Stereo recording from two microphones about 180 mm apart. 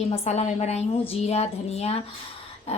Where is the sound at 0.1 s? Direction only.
40° left (ahead or behind).